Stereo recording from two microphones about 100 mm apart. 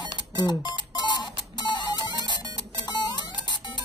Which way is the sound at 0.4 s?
45° left (ahead or behind).